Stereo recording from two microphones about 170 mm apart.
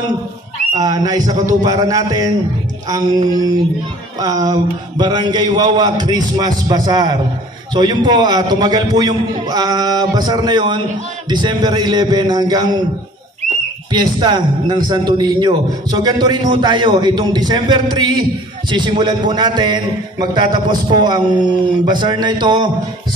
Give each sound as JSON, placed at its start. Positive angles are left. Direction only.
{"t": 0.7, "sound": "a man's voice", "side_deg": -20}
{"t": 4.2, "sound": "a man's voice", "side_deg": -20}
{"t": 13.9, "sound": "a man's voice", "side_deg": -25}